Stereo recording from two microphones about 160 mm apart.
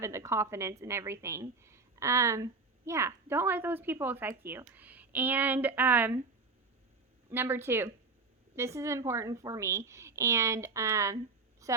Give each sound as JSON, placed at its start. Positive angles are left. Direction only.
{"t": 0.0, "sound": "a woman's voice", "side_deg": -15}
{"t": 7.3, "sound": "a woman's voice", "side_deg": -15}
{"t": 11.6, "sound": "a sound", "side_deg": -20}